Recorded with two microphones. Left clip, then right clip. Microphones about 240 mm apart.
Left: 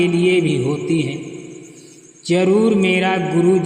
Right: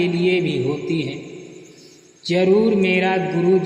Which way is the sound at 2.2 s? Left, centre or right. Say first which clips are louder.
Left 1 dB; left.